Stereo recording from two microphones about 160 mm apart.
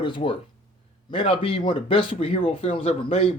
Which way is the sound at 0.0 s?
30° left (ahead or behind).